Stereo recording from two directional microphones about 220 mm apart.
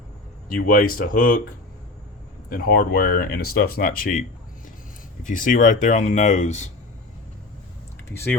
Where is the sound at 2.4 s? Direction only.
40° left (ahead or behind).